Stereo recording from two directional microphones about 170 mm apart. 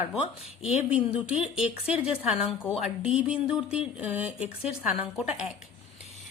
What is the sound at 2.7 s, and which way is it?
Speech, 40° left (ahead or behind).